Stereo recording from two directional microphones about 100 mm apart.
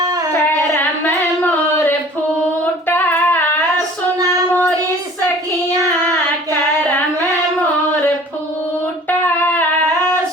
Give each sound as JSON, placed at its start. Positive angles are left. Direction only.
{"t": 0.1, "sound": "a sound", "side_deg": -40}
{"t": 2.8, "sound": "singing", "side_deg": 20}
{"t": 9.0, "sound": "child singing", "side_deg": 20}